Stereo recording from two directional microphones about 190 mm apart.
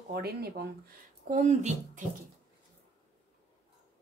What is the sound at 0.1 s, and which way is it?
Speech, 55° right (ahead or behind).